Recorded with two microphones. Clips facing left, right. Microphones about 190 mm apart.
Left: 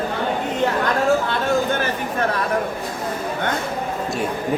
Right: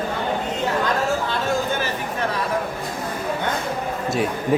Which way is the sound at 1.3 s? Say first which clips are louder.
Left 3 dB; 55° left (ahead or behind).